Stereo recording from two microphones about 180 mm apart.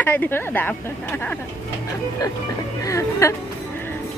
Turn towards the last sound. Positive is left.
turn(degrees=15)  # may be behind; listen again after turning